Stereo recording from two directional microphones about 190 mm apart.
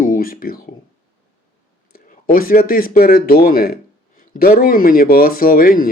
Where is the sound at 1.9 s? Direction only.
50° left (ahead or behind).